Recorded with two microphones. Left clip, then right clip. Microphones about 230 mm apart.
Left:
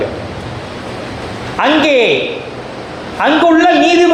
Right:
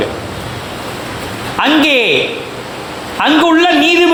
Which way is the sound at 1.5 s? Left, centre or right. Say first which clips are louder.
Even; right.